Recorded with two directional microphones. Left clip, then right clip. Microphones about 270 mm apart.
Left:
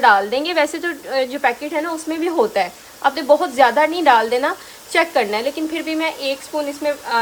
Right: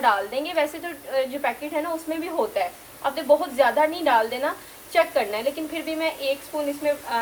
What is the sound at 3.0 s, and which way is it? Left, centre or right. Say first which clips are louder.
A woman's voice: left 6 dB; left.